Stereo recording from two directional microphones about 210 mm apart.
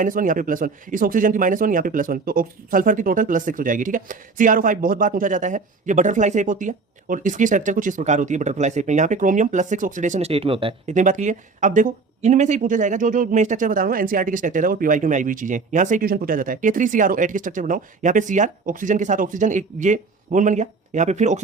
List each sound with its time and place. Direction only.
0.0 s speech: 40° right (ahead or behind)